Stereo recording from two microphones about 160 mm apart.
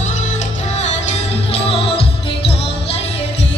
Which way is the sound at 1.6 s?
35° left (ahead or behind).